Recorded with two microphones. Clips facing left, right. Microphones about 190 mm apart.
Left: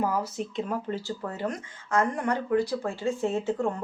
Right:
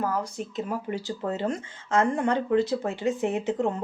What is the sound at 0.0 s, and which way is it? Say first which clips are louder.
Speech: left 1 dB; 10° left (ahead or behind).